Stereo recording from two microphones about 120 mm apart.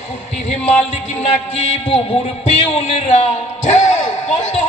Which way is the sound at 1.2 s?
75° left (ahead or behind).